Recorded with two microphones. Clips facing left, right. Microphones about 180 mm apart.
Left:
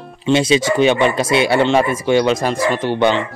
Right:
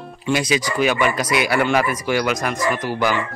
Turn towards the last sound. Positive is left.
turn(degrees=25)  # may be behind; listen again after turning